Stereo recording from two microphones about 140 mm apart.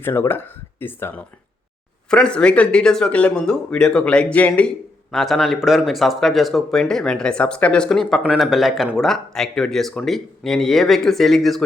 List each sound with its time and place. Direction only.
0.0 s speech: 15° left (ahead or behind)